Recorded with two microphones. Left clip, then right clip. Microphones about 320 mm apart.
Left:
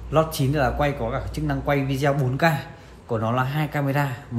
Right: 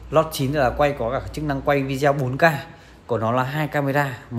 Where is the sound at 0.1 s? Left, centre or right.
Right.